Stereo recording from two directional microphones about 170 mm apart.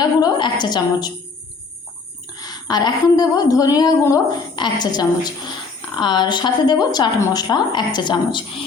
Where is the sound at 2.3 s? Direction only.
25° left (ahead or behind).